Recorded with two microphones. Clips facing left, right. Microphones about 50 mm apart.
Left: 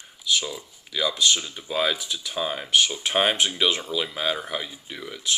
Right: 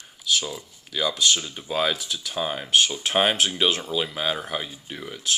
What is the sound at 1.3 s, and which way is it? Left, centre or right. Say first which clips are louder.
Speech: even; centre.